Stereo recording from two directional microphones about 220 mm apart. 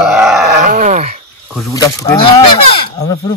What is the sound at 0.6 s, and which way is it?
Speech, 35° right (ahead or behind).